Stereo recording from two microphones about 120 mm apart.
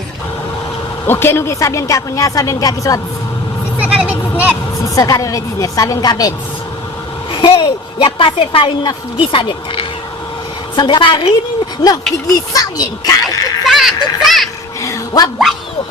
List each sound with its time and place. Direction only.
1.0 s a woman's voice: 20° left (ahead or behind)
3.8 s vehicle: 10° right (ahead or behind)
4.9 s a woman's voice: 30° left (ahead or behind)
7.3 s a woman's voice: 45° left (ahead or behind)
11.8 s a woman's voice: 35° left (ahead or behind)
13.7 s speech: centre (ahead or behind)
14.8 s a sound: 30° left (ahead or behind)